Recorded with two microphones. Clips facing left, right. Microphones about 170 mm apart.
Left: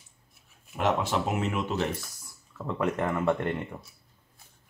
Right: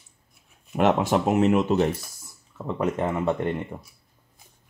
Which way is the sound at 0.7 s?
55° right (ahead or behind).